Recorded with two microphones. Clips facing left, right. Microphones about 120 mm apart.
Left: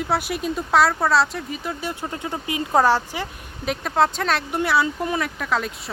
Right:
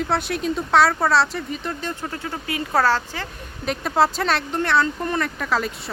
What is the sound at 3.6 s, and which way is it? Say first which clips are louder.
Speech: right 1 dB; centre (ahead or behind).